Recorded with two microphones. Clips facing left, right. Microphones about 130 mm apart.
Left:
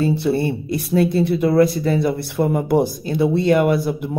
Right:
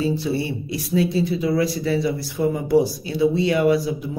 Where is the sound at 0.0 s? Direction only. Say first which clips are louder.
Left 4 dB; 60° left (ahead or behind).